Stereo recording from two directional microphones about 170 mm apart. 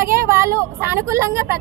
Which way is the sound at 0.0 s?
15° right (ahead or behind).